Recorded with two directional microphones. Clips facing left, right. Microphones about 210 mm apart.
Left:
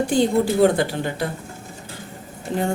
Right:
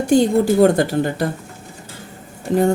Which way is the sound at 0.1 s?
45° right (ahead or behind).